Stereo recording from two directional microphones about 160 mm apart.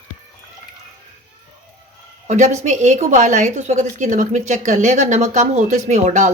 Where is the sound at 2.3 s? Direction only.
45° right (ahead or behind).